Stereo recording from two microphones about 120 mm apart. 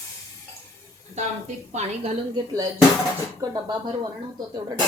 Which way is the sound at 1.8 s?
70° right (ahead or behind).